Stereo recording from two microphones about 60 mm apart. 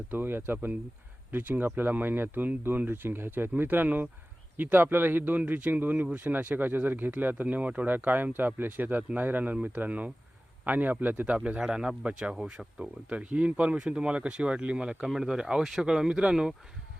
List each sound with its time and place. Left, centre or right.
0.1 s a man's voice: right
11.4 s speech: centre
15.0 s speech: centre